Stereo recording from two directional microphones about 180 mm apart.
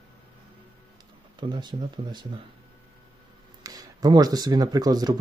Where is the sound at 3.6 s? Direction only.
20° right (ahead or behind).